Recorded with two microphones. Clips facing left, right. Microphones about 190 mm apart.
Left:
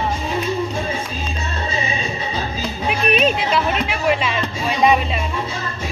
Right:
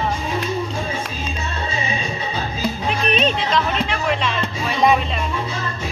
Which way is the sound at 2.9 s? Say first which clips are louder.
Left 4 dB; 10° left (ahead or behind).